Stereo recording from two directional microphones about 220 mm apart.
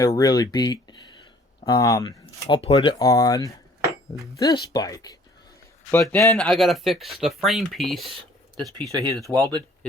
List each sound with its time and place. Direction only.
0.0 s speech: 15° left (ahead or behind); by 8.9 s centre (ahead or behind)
8.9 s speech: 15° right (ahead or behind)